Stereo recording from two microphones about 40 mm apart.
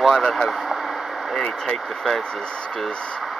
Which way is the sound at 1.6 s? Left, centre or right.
Centre.